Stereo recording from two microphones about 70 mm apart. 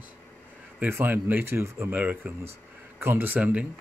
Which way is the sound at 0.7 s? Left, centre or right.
Right.